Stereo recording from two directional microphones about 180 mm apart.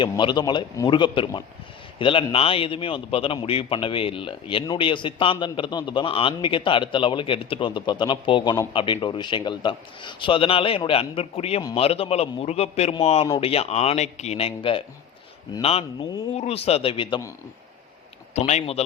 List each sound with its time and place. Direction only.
0.0 s a man's voice: 25° left (ahead or behind)
18.3 s a man's voice: 40° left (ahead or behind)